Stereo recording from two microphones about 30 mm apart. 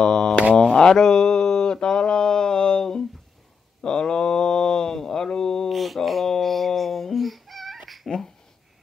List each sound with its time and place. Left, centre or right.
0.0 s mantra: centre
5.7 s mantra: centre
6.4 s a sound: centre